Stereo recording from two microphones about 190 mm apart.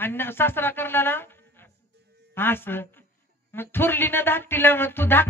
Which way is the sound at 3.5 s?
10° left (ahead or behind).